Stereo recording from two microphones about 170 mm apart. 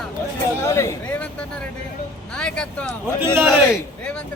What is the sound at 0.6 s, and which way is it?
Speech, 15° left (ahead or behind).